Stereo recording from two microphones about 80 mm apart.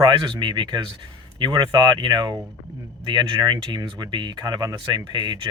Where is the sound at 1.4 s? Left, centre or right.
Right.